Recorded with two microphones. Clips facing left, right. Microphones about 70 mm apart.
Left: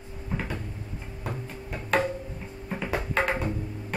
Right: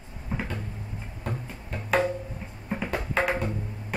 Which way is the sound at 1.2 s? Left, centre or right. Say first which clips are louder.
Even; centre.